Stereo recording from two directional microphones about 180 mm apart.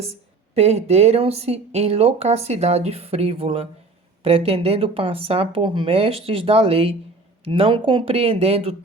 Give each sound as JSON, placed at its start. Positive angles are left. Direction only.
{"t": 0.5, "sound": "speech", "side_deg": -35}